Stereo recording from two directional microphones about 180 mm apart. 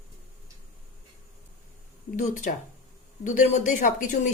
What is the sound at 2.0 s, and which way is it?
A woman's voice, 45° left (ahead or behind).